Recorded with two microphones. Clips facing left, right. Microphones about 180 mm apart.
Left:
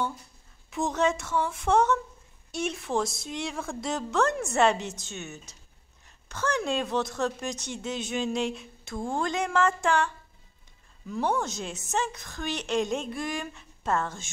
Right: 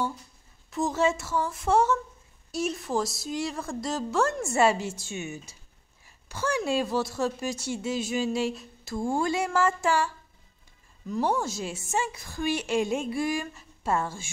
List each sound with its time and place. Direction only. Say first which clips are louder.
0.7 s a woman's voice: right 1 dB; centre (ahead or behind)